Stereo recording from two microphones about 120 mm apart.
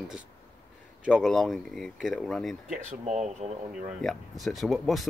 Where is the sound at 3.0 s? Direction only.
70° right (ahead or behind).